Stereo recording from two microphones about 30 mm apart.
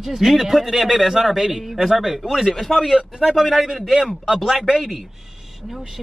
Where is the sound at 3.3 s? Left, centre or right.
Centre.